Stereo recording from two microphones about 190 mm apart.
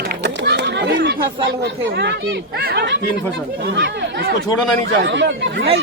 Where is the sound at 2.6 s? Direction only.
60° right (ahead or behind).